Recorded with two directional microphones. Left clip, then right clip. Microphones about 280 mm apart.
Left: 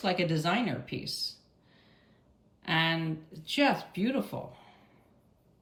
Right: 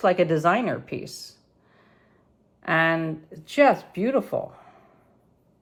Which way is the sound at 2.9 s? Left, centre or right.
Centre.